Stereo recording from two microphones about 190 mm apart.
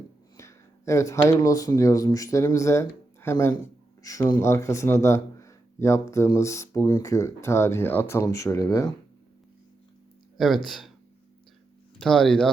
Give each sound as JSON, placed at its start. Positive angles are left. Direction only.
{"t": 0.3, "sound": "speech", "side_deg": 15}
{"t": 10.3, "sound": "speech", "side_deg": 0}
{"t": 11.9, "sound": "speech", "side_deg": 0}